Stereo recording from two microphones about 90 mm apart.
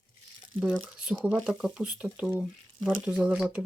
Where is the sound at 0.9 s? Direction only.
15° right (ahead or behind).